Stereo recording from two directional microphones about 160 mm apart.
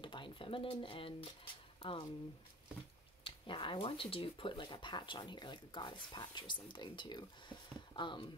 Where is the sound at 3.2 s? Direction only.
30° left (ahead or behind).